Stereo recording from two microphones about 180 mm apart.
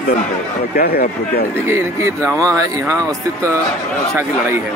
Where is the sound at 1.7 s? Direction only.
15° right (ahead or behind).